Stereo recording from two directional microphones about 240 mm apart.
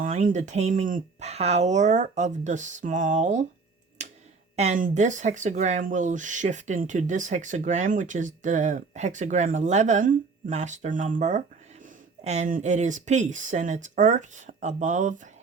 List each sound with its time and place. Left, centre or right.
0.0 s speech: right
4.0 s tick-tock: right
4.5 s speech: right